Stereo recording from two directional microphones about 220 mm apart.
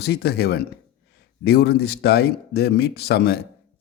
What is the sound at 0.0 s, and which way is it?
Speech, 45° left (ahead or behind).